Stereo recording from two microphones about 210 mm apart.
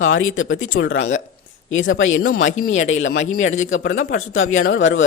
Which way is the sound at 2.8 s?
65° left (ahead or behind).